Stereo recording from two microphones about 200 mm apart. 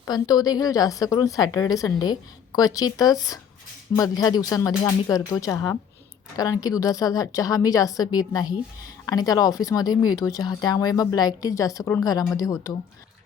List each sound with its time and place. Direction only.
0.0 s a woman's voice: 20° left (ahead or behind)